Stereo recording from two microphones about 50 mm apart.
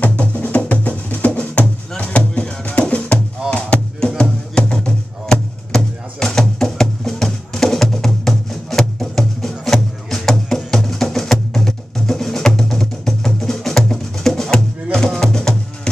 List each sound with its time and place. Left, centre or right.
0.0 s music: left